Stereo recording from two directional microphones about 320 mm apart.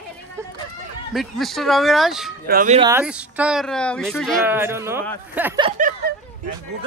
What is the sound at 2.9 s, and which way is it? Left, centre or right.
A man's voice, centre.